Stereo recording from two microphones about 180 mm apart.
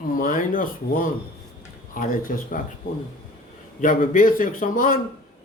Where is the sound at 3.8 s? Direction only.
50° left (ahead or behind).